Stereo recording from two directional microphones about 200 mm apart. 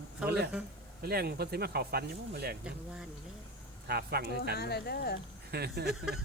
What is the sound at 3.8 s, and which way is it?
Speech, 50° right (ahead or behind).